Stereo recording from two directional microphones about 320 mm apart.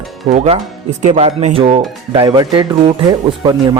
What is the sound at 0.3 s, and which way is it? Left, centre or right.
Speech, centre.